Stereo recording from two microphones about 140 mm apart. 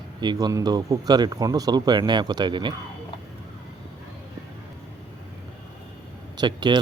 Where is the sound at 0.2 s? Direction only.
30° right (ahead or behind).